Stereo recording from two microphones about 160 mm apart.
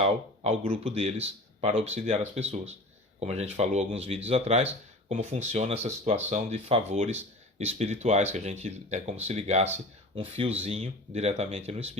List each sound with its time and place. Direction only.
0.0 s speech: 40° right (ahead or behind)